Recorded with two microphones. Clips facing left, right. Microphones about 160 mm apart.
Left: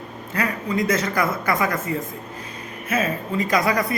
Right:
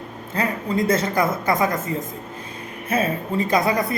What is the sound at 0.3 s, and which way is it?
A man's voice, 25° right (ahead or behind).